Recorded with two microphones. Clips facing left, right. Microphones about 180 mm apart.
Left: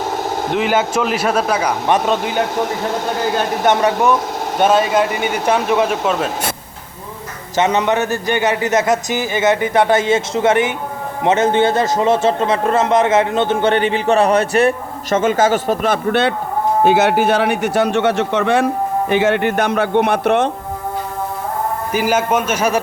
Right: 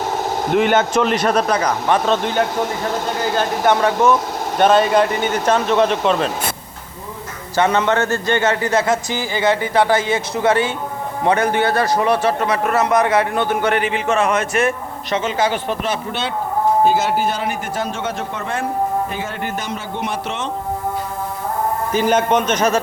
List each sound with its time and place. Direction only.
0.5 s speech: 5° left (ahead or behind)
3.7 s speech: 15° left (ahead or behind)
4.5 s speech: 5° left (ahead or behind)
7.5 s a man's voice: 20° left (ahead or behind); by 14.7 s 35° left (ahead or behind)
15.1 s speech: 50° left (ahead or behind)
16.8 s a man's voice: 70° left (ahead or behind)
21.9 s speech: 5° left (ahead or behind)